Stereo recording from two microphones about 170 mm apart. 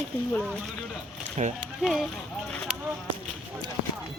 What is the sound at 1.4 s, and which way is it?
Speech, 40° right (ahead or behind).